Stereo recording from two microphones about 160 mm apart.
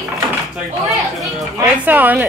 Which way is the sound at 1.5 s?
10° right (ahead or behind).